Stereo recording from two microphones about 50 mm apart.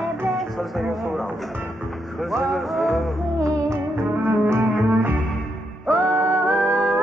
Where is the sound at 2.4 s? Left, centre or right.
Centre.